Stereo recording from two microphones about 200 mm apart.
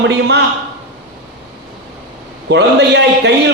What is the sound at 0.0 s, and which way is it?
Speech, 60° right (ahead or behind).